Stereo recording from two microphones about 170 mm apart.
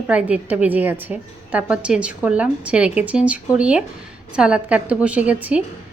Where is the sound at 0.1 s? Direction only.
10° right (ahead or behind).